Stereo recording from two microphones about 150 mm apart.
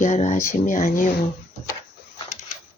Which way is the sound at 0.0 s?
50° left (ahead or behind).